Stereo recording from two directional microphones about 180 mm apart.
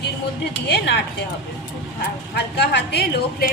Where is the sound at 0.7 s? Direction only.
75° left (ahead or behind).